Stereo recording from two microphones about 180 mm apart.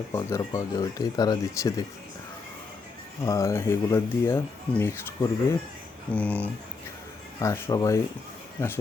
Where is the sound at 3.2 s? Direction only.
15° left (ahead or behind).